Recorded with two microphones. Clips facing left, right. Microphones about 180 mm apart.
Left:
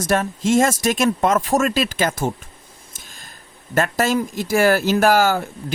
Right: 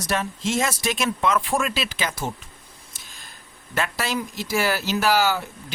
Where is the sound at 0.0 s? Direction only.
50° left (ahead or behind).